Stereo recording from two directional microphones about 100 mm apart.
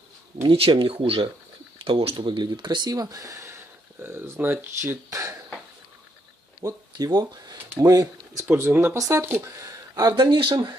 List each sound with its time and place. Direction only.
0.3 s speech: 65° right (ahead or behind); by 5.2 s 20° right (ahead or behind)
6.6 s speech: 40° right (ahead or behind)
8.5 s speech: 20° right (ahead or behind)
9.9 s speech: 40° right (ahead or behind)